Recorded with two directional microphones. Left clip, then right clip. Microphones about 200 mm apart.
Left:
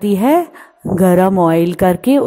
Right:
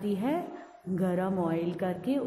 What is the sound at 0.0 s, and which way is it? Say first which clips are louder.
A woman's voice: left 18 dB; 50° left (ahead or behind).